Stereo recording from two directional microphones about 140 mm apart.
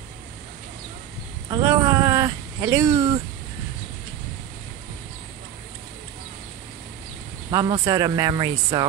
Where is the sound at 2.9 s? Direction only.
35° right (ahead or behind).